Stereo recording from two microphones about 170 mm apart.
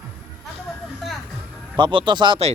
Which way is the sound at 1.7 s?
30° right (ahead or behind).